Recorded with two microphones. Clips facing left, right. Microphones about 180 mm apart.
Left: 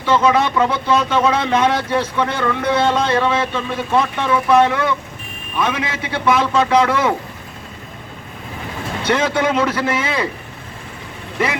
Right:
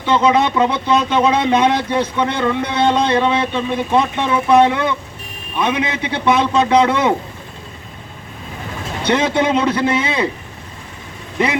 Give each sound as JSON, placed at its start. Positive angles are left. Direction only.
{"t": 0.0, "sound": "speech", "side_deg": -20}
{"t": 9.0, "sound": "speech", "side_deg": -20}